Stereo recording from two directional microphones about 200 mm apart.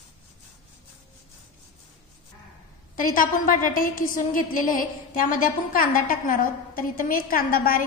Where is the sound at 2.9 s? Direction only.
45° left (ahead or behind).